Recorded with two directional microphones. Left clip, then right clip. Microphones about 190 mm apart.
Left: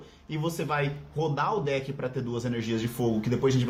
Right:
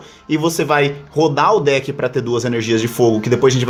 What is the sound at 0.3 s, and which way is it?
A man's voice, 45° right (ahead or behind).